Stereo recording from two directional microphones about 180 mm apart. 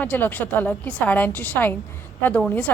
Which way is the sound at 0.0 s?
10° left (ahead or behind).